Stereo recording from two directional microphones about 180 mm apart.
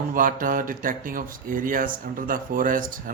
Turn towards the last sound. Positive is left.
turn(degrees=-50)  # may be behind; listen again after turning